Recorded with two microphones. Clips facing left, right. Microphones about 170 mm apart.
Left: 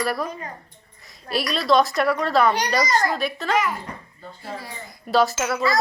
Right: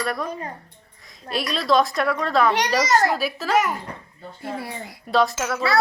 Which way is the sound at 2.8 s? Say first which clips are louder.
Right 3 dB; 75° right (ahead or behind).